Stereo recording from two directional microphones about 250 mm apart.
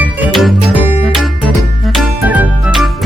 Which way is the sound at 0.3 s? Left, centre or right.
Centre.